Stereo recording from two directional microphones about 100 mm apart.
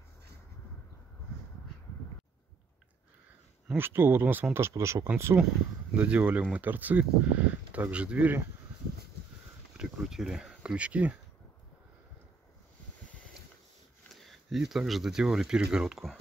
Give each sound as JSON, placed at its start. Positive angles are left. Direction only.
{"t": 3.7, "sound": "speech", "side_deg": -20}
{"t": 9.8, "sound": "speech", "side_deg": -5}
{"t": 14.2, "sound": "speech", "side_deg": 0}